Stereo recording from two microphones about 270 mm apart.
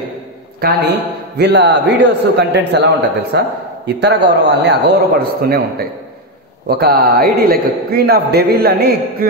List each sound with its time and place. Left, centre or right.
1.4 s a man's voice: right
6.7 s a man's voice: right